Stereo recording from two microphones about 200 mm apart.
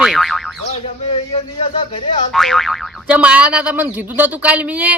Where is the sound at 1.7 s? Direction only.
25° left (ahead or behind).